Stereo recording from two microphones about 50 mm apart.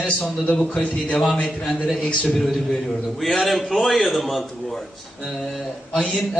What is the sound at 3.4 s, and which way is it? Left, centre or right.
A man's voice, centre.